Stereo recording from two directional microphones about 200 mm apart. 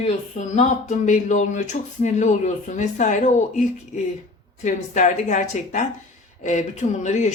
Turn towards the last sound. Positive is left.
turn(degrees=35)  # may be behind; listen again after turning